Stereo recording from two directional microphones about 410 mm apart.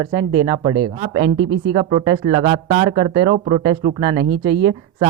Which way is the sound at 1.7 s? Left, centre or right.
Centre.